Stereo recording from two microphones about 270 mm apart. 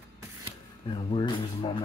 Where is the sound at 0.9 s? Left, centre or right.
Centre.